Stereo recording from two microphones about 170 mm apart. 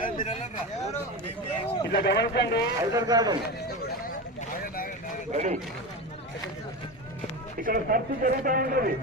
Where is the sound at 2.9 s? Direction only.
20° right (ahead or behind).